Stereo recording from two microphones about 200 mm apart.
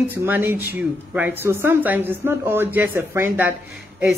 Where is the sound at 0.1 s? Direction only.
10° right (ahead or behind).